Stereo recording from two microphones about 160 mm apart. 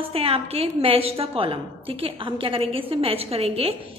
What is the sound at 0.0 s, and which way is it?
A woman's voice, 35° right (ahead or behind).